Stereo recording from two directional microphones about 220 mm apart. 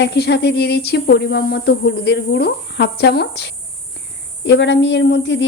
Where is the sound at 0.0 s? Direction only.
50° left (ahead or behind).